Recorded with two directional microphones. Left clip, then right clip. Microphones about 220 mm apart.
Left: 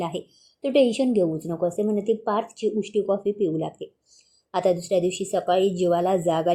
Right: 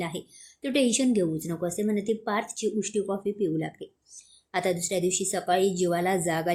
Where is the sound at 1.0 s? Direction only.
10° right (ahead or behind).